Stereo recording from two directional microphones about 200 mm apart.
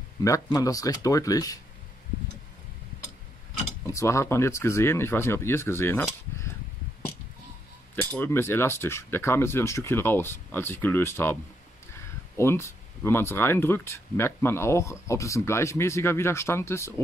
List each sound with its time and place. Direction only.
0.2 s speech: 15° left (ahead or behind)
3.8 s speech: 15° left (ahead or behind)
8.2 s speech: 10° left (ahead or behind)
12.4 s speech: 15° left (ahead or behind)